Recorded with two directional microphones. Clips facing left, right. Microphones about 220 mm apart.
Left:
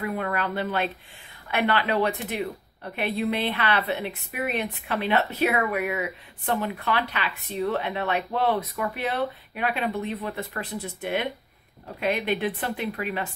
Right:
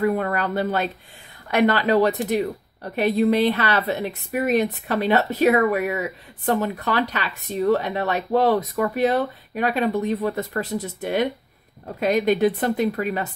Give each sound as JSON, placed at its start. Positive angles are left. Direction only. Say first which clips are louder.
{"t": 0.0, "sound": "speech", "louder": "right 6 dB", "side_deg": -40}